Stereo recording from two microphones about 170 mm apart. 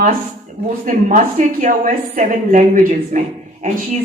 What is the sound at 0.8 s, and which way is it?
A woman's voice, 50° right (ahead or behind).